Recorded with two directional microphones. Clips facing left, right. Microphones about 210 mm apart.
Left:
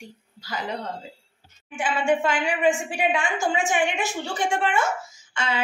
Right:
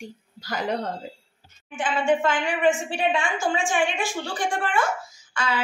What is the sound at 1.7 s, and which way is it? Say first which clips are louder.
A woman's voice: even; 10° left (ahead or behind).